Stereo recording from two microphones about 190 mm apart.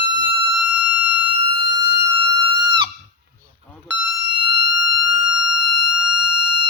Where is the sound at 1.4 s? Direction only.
25° right (ahead or behind).